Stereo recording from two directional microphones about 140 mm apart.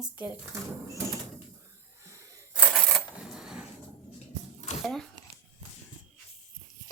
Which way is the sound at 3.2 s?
5° right (ahead or behind).